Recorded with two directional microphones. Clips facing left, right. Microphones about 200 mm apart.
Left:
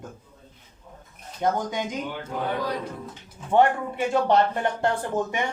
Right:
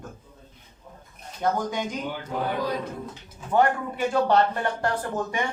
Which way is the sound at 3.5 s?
25° left (ahead or behind).